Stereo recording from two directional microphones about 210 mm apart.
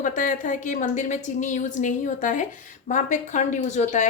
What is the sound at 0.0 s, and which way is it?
A woman's voice, 40° left (ahead or behind).